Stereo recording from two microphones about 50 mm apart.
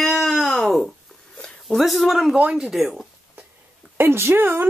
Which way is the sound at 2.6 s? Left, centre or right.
Centre.